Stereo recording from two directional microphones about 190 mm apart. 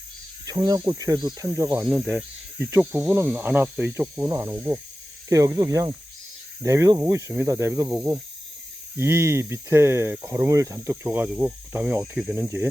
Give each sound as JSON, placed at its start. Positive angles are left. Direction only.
{"t": 0.4, "sound": "cricket", "side_deg": -20}
{"t": 1.8, "sound": "speech", "side_deg": -5}
{"t": 9.0, "sound": "speech", "side_deg": -15}